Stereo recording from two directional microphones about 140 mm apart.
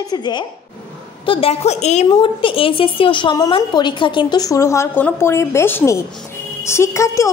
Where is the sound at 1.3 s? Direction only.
45° left (ahead or behind).